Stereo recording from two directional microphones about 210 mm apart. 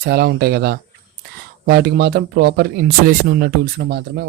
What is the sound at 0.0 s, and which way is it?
Speech, 50° right (ahead or behind).